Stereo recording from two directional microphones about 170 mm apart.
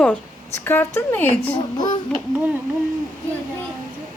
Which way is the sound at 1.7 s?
25° left (ahead or behind).